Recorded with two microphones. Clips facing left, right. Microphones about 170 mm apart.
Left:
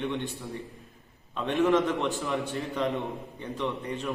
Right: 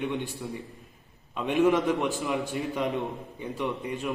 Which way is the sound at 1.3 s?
15° right (ahead or behind).